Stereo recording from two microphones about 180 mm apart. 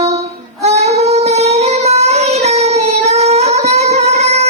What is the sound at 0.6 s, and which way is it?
Child singing, 35° right (ahead or behind).